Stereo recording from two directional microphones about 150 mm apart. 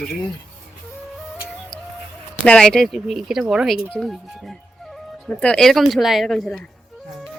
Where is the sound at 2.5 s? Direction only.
5° left (ahead or behind).